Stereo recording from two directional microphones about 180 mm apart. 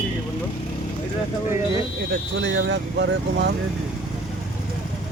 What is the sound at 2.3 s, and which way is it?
Speech, 80° right.